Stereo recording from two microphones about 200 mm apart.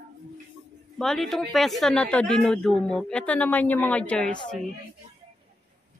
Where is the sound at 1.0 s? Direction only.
Centre (ahead or behind).